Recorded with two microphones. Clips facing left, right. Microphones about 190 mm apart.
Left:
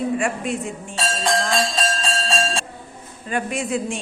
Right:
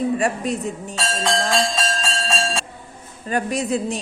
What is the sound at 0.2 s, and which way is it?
Speech, 40° right (ahead or behind).